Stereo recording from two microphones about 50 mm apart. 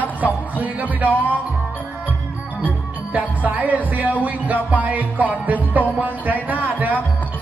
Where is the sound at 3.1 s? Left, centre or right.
Right.